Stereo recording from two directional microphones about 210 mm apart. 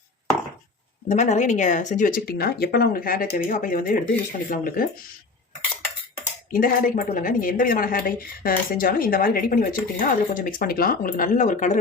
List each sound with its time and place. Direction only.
1.0 s a woman's voice: 35° left (ahead or behind)
6.5 s a woman's voice: 40° left (ahead or behind)